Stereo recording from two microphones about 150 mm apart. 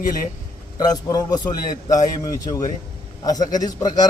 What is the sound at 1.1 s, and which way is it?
A man's voice, 25° left (ahead or behind).